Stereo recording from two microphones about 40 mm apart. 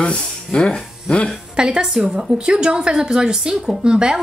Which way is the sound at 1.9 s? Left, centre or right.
Centre.